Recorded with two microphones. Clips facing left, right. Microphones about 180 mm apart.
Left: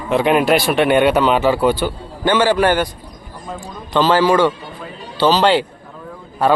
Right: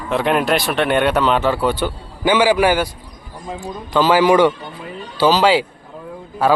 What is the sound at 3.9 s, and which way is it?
Speech, 10° right (ahead or behind).